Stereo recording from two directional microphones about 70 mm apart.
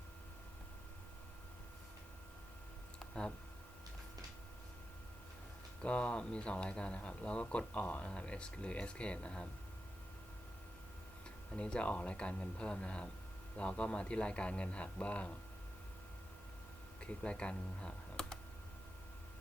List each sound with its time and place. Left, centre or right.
5.8 s speech: centre
11.5 s speech: centre
17.0 s speech: centre